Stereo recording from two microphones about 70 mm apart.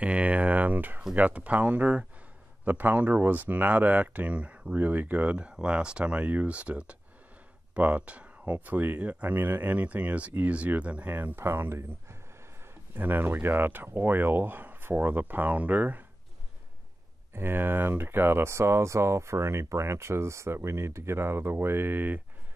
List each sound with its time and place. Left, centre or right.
0.0 s a sound: centre
1.1 s speech: right
17.3 s speech: right